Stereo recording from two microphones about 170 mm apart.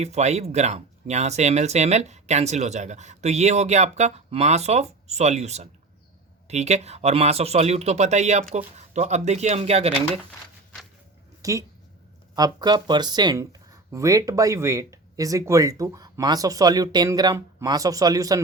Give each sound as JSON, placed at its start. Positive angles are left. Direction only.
{"t": 0.0, "sound": "speech", "side_deg": -40}
{"t": 11.4, "sound": "speech", "side_deg": -20}